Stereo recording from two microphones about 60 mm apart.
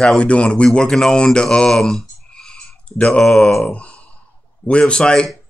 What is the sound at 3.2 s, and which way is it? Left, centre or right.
Speech, centre.